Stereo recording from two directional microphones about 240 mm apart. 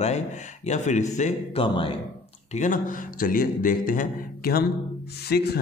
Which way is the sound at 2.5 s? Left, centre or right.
Left.